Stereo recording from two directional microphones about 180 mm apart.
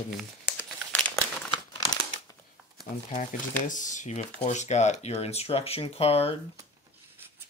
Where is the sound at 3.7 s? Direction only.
45° left (ahead or behind).